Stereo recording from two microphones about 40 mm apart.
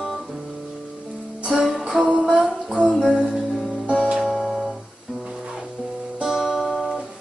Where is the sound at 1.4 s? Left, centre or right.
Centre.